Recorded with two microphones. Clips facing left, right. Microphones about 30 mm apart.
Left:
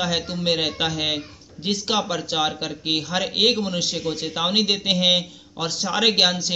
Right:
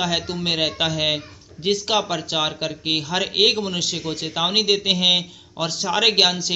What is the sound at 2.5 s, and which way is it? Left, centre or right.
Speech, right.